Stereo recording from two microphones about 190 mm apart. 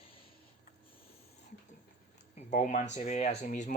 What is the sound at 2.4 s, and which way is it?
Speech, 40° left (ahead or behind).